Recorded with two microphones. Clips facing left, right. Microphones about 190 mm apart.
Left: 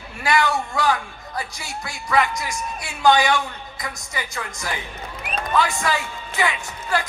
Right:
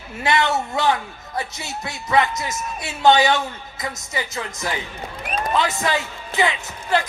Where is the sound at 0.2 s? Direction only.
25° right (ahead or behind).